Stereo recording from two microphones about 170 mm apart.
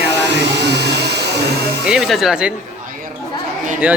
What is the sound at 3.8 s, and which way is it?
Speech, 10° right (ahead or behind).